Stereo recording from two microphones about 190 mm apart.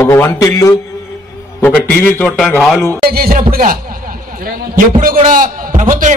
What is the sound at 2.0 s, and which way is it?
Speech, 10° left (ahead or behind).